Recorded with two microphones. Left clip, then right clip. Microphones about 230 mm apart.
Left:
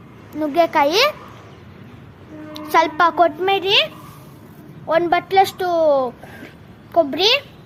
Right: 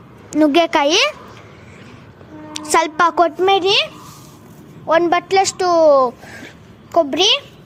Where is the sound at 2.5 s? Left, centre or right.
Right.